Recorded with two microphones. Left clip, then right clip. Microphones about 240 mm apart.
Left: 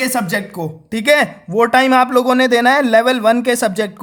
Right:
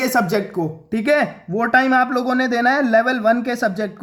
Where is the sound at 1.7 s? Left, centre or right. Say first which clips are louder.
Left 3 dB; left.